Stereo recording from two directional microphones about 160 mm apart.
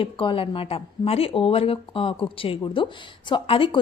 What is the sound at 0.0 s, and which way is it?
A woman's voice, 35° left (ahead or behind).